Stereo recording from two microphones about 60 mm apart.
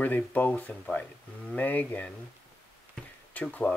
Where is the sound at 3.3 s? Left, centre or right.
Left.